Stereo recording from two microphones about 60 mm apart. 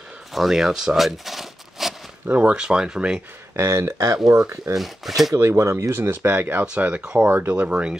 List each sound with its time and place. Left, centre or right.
0.3 s a sound: centre
2.2 s speech: right
2.5 s speech: centre
3.5 s speech: right
4.7 s speech: centre
5.3 s speech: right
5.9 s speech: right
7.0 s speech: centre
7.2 s speech: right
7.5 s speech: right